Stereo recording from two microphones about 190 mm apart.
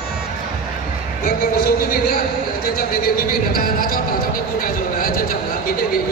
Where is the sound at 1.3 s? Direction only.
50° left (ahead or behind).